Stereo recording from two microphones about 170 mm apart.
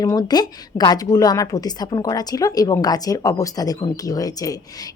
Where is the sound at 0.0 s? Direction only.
20° left (ahead or behind).